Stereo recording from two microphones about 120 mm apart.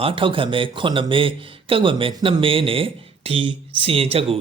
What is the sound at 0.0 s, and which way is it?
A man's voice, 45° right (ahead or behind).